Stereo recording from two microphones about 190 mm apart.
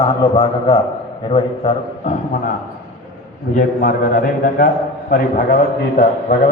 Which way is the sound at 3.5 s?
45° left (ahead or behind).